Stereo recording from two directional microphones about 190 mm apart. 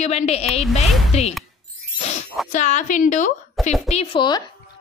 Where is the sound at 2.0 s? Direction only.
35° left (ahead or behind).